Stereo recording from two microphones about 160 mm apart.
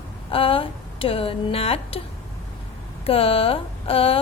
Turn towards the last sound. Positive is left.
turn(degrees=35)  # may be behind; listen again after turning